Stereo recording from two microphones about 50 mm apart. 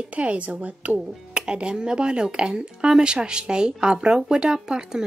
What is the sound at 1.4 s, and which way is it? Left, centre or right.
Speech, centre.